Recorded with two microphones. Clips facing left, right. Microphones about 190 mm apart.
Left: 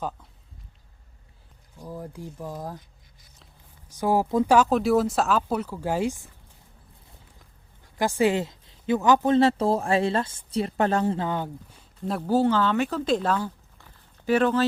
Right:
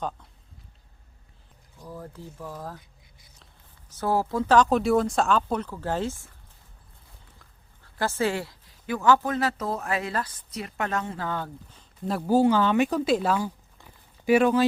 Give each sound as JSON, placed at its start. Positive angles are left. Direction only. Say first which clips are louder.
{"t": 1.8, "sound": "speech", "louder": "left 3 dB", "side_deg": 15}
{"t": 3.8, "sound": "speech", "louder": "left 2 dB", "side_deg": 15}
{"t": 7.9, "sound": "speech", "louder": "left 4 dB", "side_deg": 15}
{"t": 11.3, "sound": "speech", "louder": "left 3 dB", "side_deg": 15}
{"t": 12.0, "sound": "speech", "louder": "even", "side_deg": 0}
{"t": 12.3, "sound": "speech", "louder": "right 1 dB", "side_deg": -10}